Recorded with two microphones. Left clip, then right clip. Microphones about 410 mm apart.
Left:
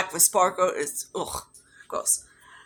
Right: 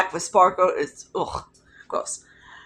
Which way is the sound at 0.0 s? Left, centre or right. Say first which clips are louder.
Right 5 dB; left.